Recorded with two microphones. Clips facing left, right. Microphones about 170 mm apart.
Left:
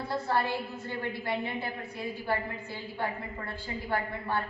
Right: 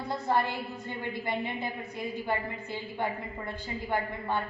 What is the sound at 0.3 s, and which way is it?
A woman's voice, 20° right (ahead or behind).